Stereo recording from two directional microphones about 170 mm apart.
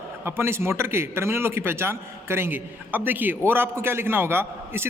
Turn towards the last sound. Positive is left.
turn(degrees=-15)  # may be behind; listen again after turning